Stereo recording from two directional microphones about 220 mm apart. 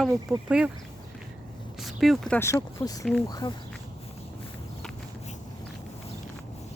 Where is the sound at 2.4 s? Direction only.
15° left (ahead or behind).